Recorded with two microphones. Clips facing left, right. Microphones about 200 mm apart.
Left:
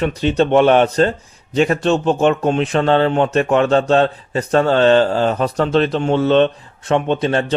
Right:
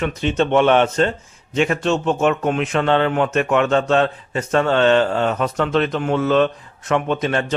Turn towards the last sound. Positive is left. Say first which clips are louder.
# left 3 dB
turn(degrees=30)  # may be behind; listen again after turning